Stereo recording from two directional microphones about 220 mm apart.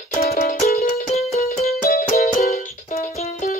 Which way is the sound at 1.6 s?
40° left (ahead or behind).